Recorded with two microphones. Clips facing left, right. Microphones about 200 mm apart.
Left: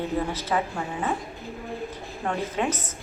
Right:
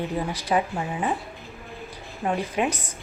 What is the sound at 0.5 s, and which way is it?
Speech, 20° right (ahead or behind).